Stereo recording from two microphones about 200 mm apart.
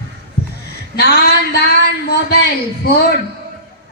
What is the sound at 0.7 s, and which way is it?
A man's voice, 55° left (ahead or behind).